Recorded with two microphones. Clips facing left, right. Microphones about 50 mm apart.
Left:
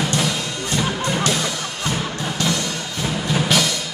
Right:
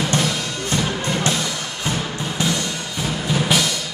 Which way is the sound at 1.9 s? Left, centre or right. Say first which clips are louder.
Even; right.